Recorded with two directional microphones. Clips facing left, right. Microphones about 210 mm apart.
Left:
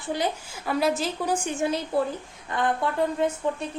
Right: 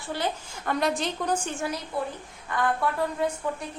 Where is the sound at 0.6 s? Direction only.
5° left (ahead or behind).